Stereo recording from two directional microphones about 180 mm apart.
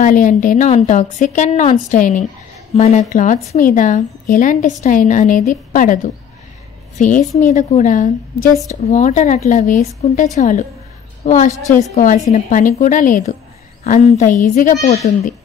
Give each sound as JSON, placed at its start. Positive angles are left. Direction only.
{"t": 0.0, "sound": "a woman's voice", "side_deg": 45}